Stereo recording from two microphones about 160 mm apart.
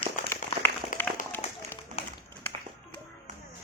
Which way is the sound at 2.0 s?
40° left (ahead or behind).